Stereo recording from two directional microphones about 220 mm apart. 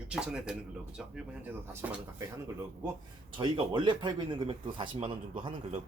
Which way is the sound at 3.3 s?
20° right (ahead or behind).